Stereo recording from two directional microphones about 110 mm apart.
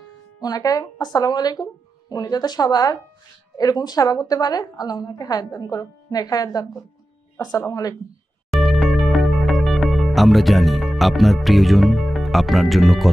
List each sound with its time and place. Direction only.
0.4 s a woman's voice: 35° left (ahead or behind)
8.5 s music: centre (ahead or behind)